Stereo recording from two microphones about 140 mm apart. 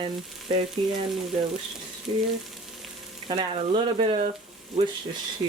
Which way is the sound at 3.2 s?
40° right (ahead or behind).